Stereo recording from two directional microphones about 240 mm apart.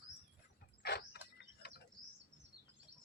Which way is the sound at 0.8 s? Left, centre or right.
Left.